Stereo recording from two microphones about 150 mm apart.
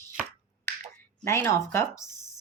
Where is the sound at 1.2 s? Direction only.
15° left (ahead or behind).